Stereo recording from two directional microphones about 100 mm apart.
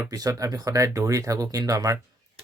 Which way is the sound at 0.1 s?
35° right (ahead or behind).